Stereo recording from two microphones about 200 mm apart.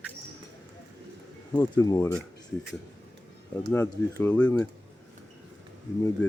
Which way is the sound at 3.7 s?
10° left (ahead or behind).